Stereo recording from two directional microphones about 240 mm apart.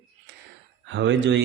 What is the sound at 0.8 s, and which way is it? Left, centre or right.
Speech, right.